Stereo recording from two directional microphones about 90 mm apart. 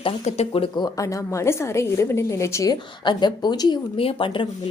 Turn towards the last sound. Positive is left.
turn(degrees=70)  # may be behind; listen again after turning